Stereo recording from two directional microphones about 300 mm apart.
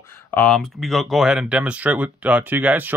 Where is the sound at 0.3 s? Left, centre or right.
Centre.